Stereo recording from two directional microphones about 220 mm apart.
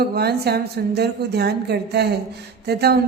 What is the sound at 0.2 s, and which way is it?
A man's voice, 45° right (ahead or behind).